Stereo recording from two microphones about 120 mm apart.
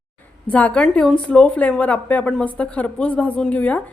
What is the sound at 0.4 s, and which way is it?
A woman's voice, 10° left (ahead or behind).